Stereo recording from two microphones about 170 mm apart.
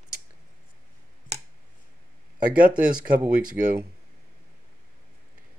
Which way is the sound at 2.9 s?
55° right (ahead or behind).